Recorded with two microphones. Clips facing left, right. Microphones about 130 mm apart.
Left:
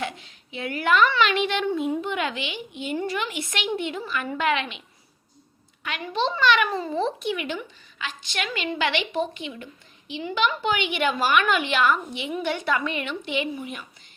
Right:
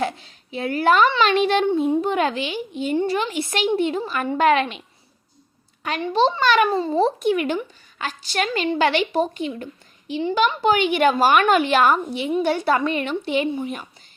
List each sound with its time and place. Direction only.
0.0 s a sound: 35° right (ahead or behind)
1.2 s a child's voice: 35° right (ahead or behind)
5.8 s a child's voice: 35° right (ahead or behind)